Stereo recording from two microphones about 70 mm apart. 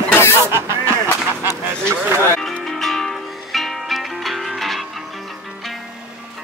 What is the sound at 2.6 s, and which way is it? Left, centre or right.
Music, centre.